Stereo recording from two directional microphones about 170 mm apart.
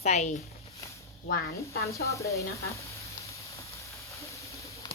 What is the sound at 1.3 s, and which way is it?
Speech, 65° left (ahead or behind).